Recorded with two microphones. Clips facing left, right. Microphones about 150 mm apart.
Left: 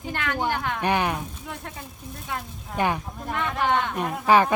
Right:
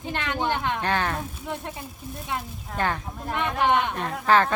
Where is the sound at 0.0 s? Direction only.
20° right (ahead or behind).